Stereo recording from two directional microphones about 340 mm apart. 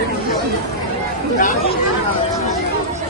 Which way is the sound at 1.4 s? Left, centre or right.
Left.